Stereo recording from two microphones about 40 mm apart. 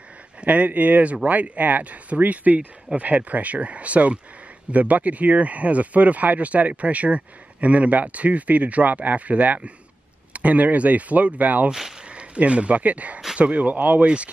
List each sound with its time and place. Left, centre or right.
0.4 s speech: right
14.0 s speech: right